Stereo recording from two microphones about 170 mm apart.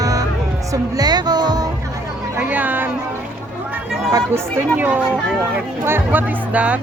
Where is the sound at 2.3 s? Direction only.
10° right (ahead or behind).